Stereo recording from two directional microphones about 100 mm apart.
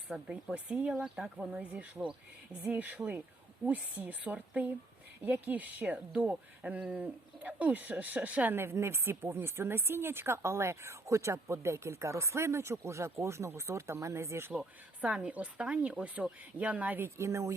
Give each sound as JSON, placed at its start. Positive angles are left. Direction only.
{"t": 0.1, "sound": "speech", "side_deg": -5}
{"t": 14.5, "sound": "speech", "side_deg": -10}